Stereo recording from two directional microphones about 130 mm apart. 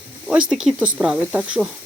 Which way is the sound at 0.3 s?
5° right (ahead or behind).